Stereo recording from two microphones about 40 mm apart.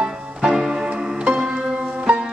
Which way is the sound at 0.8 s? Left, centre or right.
Right.